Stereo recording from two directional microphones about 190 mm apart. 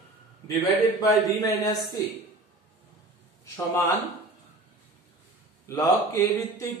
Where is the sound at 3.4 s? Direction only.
15° left (ahead or behind).